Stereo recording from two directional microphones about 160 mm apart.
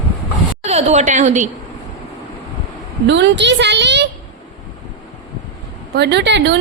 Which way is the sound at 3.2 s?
90° right.